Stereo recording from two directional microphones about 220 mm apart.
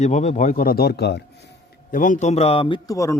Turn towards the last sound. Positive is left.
turn(degrees=15)  # may be behind; listen again after turning